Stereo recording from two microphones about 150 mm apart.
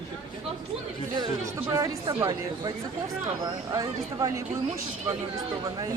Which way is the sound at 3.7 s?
20° right (ahead or behind).